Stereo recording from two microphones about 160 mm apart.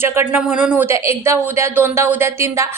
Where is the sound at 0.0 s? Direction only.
15° right (ahead or behind).